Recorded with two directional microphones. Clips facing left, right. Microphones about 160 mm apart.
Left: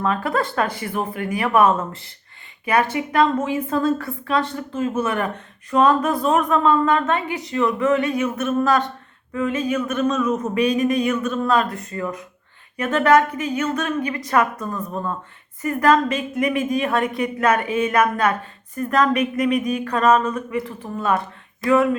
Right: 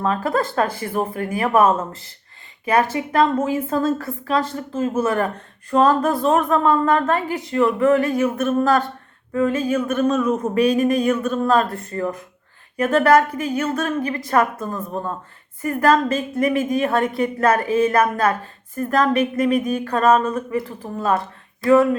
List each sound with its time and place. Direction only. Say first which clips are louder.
0.0 s a woman's voice: right 1 dB; 30° right (ahead or behind)
2.6 s a woman's voice: right 1 dB; 40° right (ahead or behind)
10.5 s a woman's voice: right 3 dB; 50° right (ahead or behind); by 21.8 s 35° right (ahead or behind)